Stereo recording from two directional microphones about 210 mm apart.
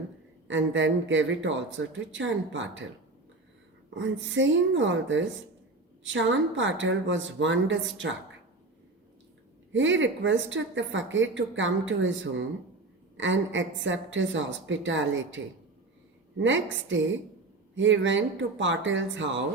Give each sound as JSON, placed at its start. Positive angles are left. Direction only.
{"t": 0.4, "sound": "a woman's voice", "side_deg": -65}
{"t": 3.8, "sound": "a woman's voice", "side_deg": -60}
{"t": 9.7, "sound": "a woman's voice", "side_deg": -65}
{"t": 16.4, "sound": "a woman's voice", "side_deg": -60}